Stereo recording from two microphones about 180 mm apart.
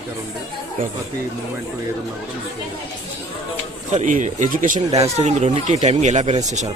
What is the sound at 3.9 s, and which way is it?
Speech, 45° right (ahead or behind).